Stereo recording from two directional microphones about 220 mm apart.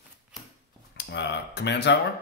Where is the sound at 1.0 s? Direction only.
50° left (ahead or behind).